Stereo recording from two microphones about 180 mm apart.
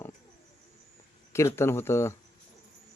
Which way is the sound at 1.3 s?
15° left (ahead or behind).